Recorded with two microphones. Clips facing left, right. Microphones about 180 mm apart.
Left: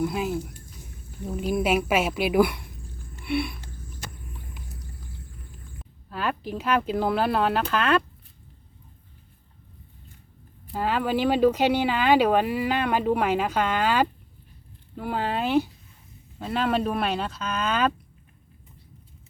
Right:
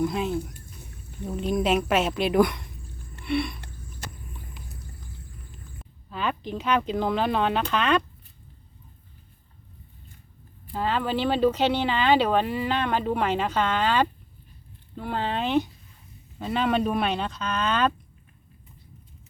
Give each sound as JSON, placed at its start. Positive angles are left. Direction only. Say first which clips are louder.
{"t": 0.0, "sound": "speech", "louder": "right 1 dB", "side_deg": 5}
{"t": 3.2, "sound": "a sound", "louder": "even", "side_deg": 5}
{"t": 5.8, "sound": "speech", "louder": "even", "side_deg": 5}
{"t": 10.7, "sound": "speech", "louder": "left 1 dB", "side_deg": 10}